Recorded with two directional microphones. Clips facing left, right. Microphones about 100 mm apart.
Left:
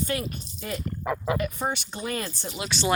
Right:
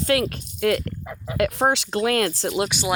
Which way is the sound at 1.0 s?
90° left.